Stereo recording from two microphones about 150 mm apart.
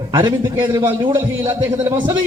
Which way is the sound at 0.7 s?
20° right (ahead or behind).